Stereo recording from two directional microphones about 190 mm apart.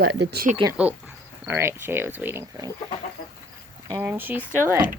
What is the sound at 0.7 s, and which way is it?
Speech, 10° right (ahead or behind).